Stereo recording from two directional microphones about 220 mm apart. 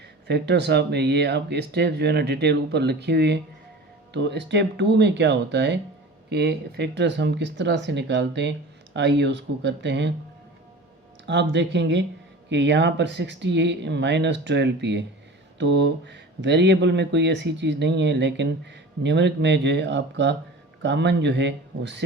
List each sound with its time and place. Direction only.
0.3 s speech: 50° right (ahead or behind)
11.3 s speech: 55° right (ahead or behind)